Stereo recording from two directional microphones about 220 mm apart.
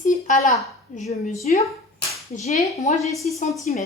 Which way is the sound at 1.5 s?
30° left (ahead or behind).